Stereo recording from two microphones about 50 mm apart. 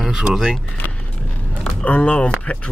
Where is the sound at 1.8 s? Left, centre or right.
Left.